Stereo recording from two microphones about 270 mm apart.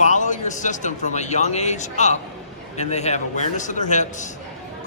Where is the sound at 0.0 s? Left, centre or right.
Left.